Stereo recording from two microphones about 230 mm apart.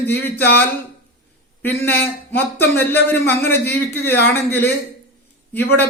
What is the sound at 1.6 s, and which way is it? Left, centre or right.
A man's voice, centre.